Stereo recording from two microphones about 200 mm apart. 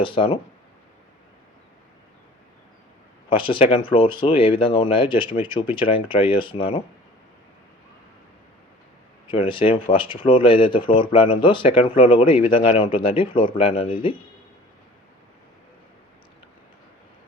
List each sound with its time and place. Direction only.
0.0 s speech: 25° left (ahead or behind)
3.2 s speech: 25° left (ahead or behind)
9.2 s speech: 25° left (ahead or behind)